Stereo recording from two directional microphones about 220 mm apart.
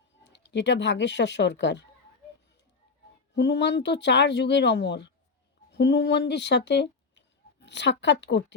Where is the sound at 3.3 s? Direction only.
50° left (ahead or behind).